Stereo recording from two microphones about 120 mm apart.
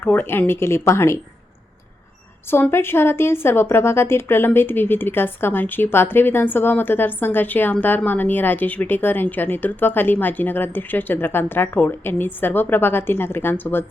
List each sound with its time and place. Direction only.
0.0 s speech: 15° left (ahead or behind)
2.5 s speech: 20° left (ahead or behind)